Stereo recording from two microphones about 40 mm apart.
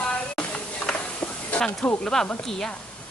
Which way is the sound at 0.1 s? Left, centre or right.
Left.